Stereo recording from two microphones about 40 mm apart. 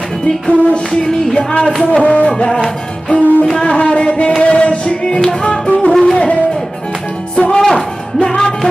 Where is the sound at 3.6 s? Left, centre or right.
Left.